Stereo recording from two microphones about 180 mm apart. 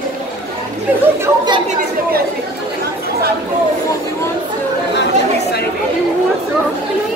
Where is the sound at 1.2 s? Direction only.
25° right (ahead or behind).